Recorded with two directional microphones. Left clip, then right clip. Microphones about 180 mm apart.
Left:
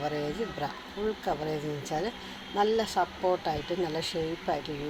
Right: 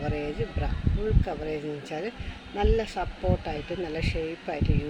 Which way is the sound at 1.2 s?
15° right (ahead or behind).